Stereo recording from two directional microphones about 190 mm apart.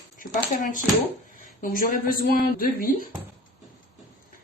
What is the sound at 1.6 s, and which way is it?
Speech, 45° left (ahead or behind).